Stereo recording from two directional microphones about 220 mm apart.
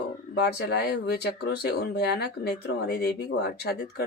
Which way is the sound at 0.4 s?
50° left (ahead or behind).